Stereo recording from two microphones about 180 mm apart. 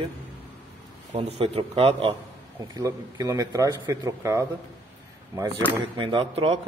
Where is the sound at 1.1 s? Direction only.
30° right (ahead or behind).